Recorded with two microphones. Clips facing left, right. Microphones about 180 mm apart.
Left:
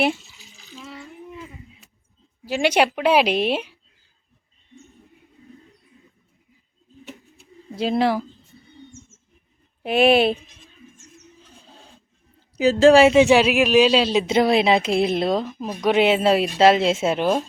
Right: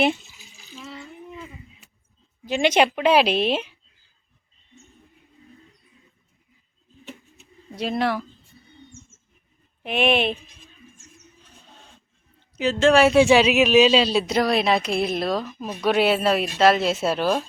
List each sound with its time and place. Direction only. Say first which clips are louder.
1.0 s a sound: left 1 dB; centre (ahead or behind)
2.4 s a woman's voice: even; 5° left (ahead or behind)
7.8 s speech: left 4 dB; 25° left (ahead or behind)
11.6 s a sound: left 2 dB; 30° left (ahead or behind)
12.5 s speech: left 4 dB; 35° left (ahead or behind)
13.1 s speech: left 1 dB; 15° left (ahead or behind)